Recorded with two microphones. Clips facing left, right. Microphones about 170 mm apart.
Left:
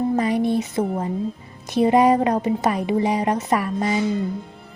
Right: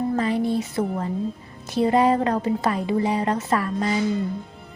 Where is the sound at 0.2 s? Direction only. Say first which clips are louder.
Left 2 dB; 15° left (ahead or behind).